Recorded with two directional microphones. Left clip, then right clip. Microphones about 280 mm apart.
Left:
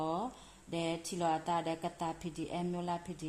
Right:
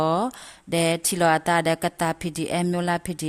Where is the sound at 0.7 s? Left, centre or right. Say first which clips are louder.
Right 14 dB; right.